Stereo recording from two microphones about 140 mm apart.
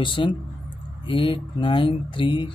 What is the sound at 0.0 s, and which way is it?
A man's voice, 35° left (ahead or behind).